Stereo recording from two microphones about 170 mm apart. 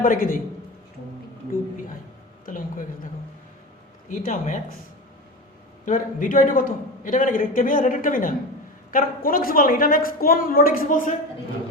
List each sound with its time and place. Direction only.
0.0 s a woman's voice: 55° left (ahead or behind)
2.5 s a sound: 55° left (ahead or behind)
4.1 s a man's voice: 50° left (ahead or behind)
5.8 s a man's voice: 50° left (ahead or behind)